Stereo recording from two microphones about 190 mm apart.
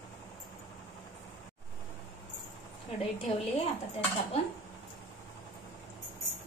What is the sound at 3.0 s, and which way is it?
Speech, 30° left (ahead or behind).